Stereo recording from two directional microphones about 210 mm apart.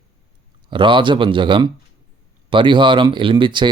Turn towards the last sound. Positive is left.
turn(degrees=-20)  # may be behind; listen again after turning